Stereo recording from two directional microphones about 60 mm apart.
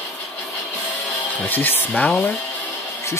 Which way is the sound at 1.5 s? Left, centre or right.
Left.